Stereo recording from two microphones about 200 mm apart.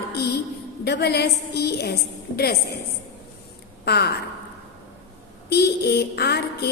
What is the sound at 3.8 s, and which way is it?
Speech, 55° left (ahead or behind).